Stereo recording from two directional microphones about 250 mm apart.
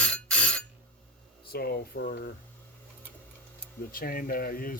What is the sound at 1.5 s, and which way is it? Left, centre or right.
Speech, left.